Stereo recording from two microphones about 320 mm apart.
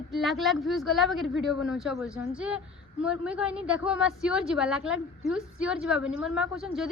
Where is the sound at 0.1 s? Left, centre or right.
Centre.